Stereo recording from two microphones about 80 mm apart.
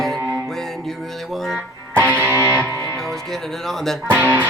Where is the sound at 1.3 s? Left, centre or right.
Centre.